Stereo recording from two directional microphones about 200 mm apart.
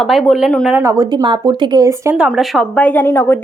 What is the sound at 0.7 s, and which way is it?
Speech, 15° right (ahead or behind).